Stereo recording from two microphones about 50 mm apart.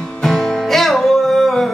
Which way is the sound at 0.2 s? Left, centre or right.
Centre.